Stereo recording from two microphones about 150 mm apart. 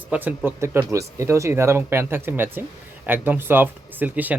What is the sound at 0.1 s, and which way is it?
Speech, 10° right (ahead or behind).